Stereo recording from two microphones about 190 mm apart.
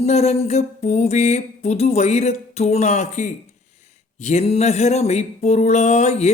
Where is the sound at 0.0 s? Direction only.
35° left (ahead or behind).